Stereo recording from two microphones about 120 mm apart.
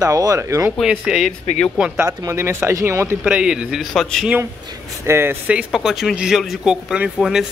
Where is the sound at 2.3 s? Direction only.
20° right (ahead or behind).